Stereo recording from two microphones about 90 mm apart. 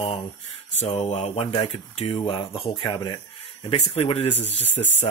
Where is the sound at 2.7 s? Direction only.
60° left (ahead or behind).